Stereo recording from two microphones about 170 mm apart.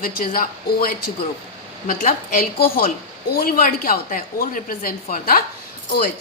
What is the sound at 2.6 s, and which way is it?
Speech, 60° left (ahead or behind).